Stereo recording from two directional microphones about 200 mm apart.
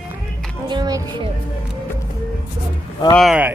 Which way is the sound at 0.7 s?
20° right (ahead or behind).